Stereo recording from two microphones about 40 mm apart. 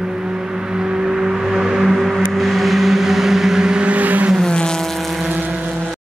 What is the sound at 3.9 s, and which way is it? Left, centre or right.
Vehicle, right.